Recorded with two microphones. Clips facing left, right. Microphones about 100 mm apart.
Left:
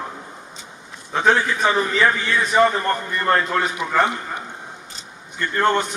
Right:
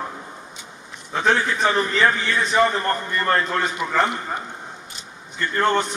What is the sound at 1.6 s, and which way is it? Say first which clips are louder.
A man's voice: left 1 dB; 10° left (ahead or behind).